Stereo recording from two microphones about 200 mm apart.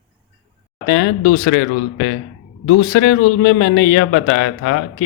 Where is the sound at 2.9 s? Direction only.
65° left (ahead or behind).